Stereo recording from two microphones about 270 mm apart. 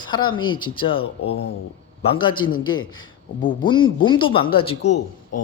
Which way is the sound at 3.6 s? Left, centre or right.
Centre.